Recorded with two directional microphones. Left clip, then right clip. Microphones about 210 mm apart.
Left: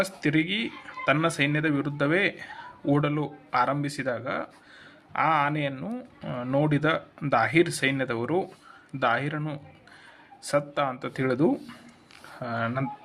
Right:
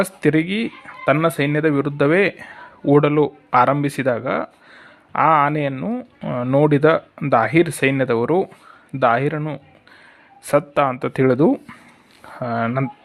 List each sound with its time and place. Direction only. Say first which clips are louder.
0.0 s speech: right 7 dB; 50° right (ahead or behind)
5.7 s speech: right 10 dB; 35° right (ahead or behind)
10.4 s speech: right 9 dB; 40° right (ahead or behind)